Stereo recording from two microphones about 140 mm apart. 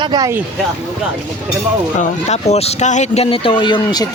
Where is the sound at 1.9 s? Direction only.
55° left (ahead or behind); by 4.1 s 30° left (ahead or behind).